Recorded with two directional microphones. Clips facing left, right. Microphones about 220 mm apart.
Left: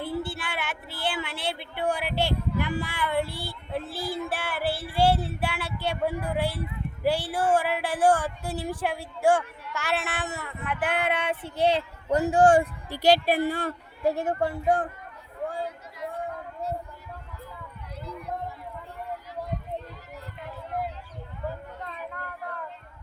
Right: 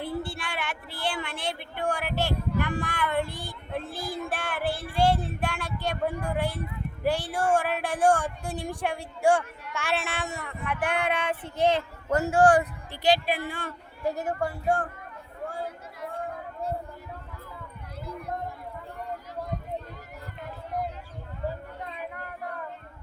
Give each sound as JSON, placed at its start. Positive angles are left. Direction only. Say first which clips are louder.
{"t": 0.0, "sound": "a sound", "louder": "left 1 dB", "side_deg": 5}
{"t": 1.7, "sound": "speech", "louder": "left 2 dB", "side_deg": 10}
{"t": 12.9, "sound": "a woman's voice", "louder": "left 3 dB", "side_deg": 45}
{"t": 14.2, "sound": "speech", "louder": "left 3 dB", "side_deg": 25}